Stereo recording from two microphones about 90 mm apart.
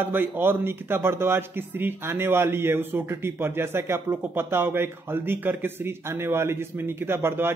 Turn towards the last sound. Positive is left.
turn(degrees=-25)  # may be behind; listen again after turning